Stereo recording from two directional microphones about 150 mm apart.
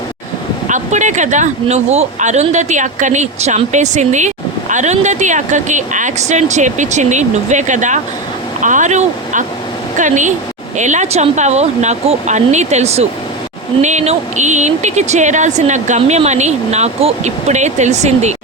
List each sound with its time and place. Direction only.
0.7 s speech: 55° right (ahead or behind)